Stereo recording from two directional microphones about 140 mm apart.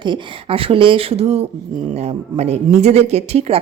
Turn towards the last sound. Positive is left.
turn(degrees=-45)  # may be behind; listen again after turning